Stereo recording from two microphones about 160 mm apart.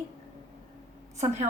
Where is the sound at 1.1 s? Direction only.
45° right (ahead or behind).